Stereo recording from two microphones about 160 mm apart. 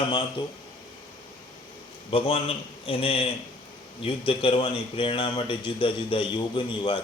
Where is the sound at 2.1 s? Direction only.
35° left (ahead or behind).